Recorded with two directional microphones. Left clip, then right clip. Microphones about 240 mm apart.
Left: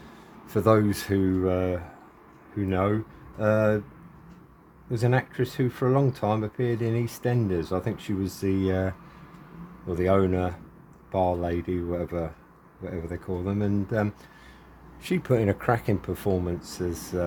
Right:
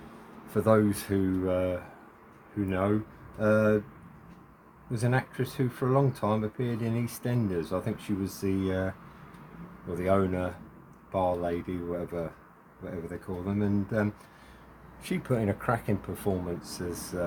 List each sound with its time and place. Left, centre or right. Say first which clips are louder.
0.4 s speech: left 3 dB; left
4.9 s speech: left 4 dB; left
9.9 s speech: left 4 dB; left